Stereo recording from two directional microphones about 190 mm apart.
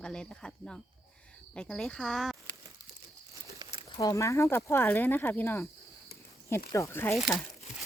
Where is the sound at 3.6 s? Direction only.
25° right (ahead or behind).